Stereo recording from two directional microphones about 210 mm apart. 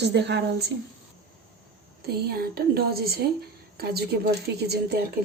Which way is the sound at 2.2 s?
45° right (ahead or behind).